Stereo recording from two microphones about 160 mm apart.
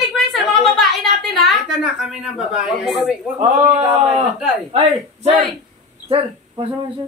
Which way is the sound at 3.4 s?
40° right (ahead or behind).